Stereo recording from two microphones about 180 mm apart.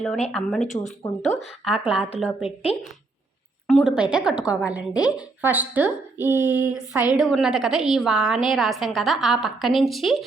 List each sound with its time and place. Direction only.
0.3 s a woman's voice: centre (ahead or behind)
0.6 s speech: 40° left (ahead or behind)
1.6 s a woman's voice: 5° right (ahead or behind)
2.7 s speech: 35° left (ahead or behind)
3.7 s a woman's voice: centre (ahead or behind)
6.6 s a sound: 10° right (ahead or behind)
7.2 s a woman's voice: centre (ahead or behind)